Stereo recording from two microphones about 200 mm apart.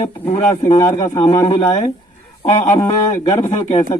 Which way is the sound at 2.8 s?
15° left (ahead or behind).